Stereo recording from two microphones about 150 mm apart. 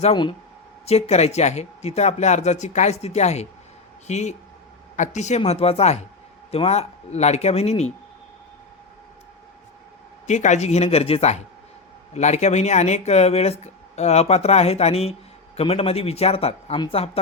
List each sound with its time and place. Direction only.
0.0 s speech: 35° left (ahead or behind)
0.9 s speech: 45° left (ahead or behind)
10.2 s speech: 50° left (ahead or behind)